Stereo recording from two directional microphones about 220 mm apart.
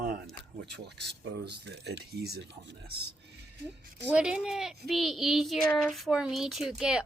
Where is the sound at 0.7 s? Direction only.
50° right (ahead or behind).